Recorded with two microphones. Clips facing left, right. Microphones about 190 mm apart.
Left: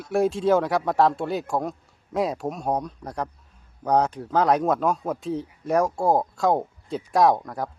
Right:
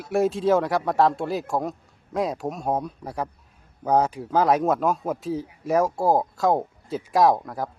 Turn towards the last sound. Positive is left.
turn(degrees=0)  # may be behind; listen again after turning